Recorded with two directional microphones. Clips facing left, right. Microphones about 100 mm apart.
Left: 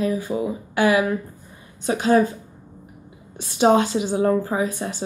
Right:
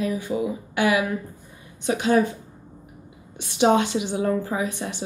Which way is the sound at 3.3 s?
35° left (ahead or behind).